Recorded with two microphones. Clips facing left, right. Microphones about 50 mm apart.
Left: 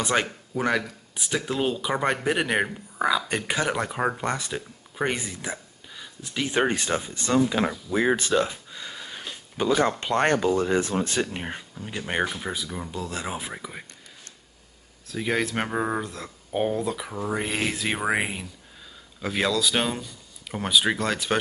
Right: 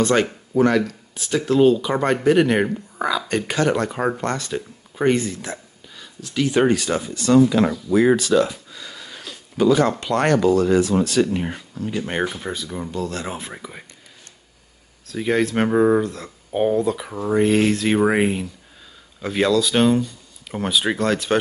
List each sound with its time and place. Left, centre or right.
0.0 s speech: centre
8.2 s a sound: left
9.8 s speech: left
11.7 s speech: centre
15.0 s speech: centre